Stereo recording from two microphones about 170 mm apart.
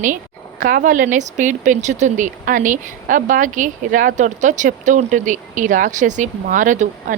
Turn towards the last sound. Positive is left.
turn(degrees=-50)  # may be behind; listen again after turning